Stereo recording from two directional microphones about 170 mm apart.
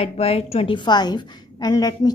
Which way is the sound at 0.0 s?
35° left (ahead or behind).